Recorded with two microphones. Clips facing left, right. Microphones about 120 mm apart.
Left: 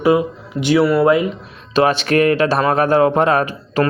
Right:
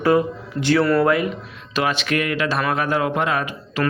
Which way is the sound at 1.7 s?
35° left (ahead or behind).